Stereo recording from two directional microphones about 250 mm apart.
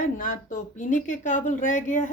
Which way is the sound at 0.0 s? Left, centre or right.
Left.